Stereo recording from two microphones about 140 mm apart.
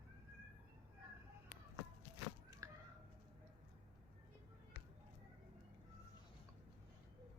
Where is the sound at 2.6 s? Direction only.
25° right (ahead or behind).